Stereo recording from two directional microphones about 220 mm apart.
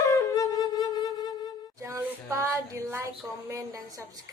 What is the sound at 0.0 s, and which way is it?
Wind instrument, 15° left (ahead or behind).